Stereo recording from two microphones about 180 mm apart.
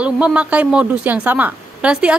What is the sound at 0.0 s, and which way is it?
A woman's voice, 5° right (ahead or behind).